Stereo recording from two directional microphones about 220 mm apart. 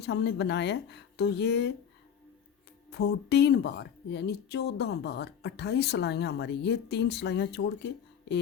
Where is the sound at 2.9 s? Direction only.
50° left (ahead or behind).